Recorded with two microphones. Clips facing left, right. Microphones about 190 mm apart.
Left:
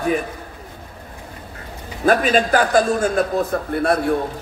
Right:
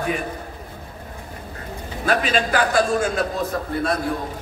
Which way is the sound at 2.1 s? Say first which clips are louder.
Left 5 dB; 45° left (ahead or behind).